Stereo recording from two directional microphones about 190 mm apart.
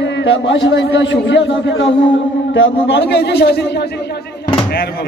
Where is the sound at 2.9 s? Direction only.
60° left (ahead or behind).